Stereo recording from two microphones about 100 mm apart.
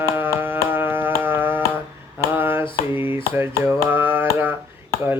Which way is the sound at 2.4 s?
20° right (ahead or behind).